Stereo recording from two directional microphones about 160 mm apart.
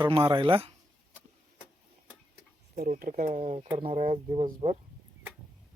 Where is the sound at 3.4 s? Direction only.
40° right (ahead or behind).